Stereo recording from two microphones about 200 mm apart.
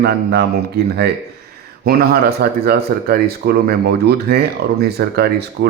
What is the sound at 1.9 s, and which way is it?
Speech, 50° right (ahead or behind).